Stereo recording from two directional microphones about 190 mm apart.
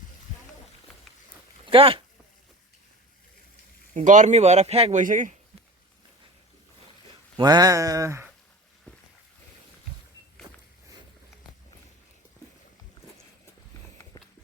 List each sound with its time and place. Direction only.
1.6 s speech: 30° right (ahead or behind)
3.9 s a man's voice: 40° right (ahead or behind)
7.3 s speech: 20° right (ahead or behind)
10.4 s walk: 30° right (ahead or behind)